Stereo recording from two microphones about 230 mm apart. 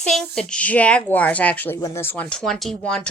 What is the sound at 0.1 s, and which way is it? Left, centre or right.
Speech, centre.